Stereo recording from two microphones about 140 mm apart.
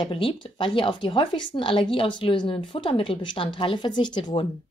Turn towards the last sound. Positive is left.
turn(degrees=35)  # may be behind; listen again after turning